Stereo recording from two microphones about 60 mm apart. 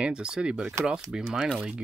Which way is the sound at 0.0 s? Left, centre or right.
Centre.